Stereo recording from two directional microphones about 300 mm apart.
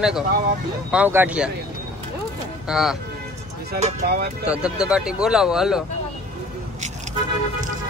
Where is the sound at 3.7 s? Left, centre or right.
Right.